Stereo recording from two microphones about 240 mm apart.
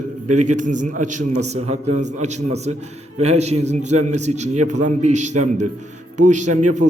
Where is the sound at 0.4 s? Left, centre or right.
Right.